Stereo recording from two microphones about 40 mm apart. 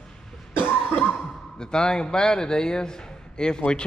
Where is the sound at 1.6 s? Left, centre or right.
Centre.